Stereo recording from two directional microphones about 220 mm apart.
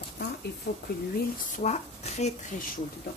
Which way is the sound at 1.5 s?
30° left (ahead or behind).